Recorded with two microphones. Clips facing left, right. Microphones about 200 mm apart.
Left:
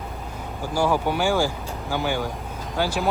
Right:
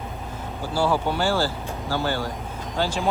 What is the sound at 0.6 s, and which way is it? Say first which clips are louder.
Speech: left 1 dB; 15° left (ahead or behind).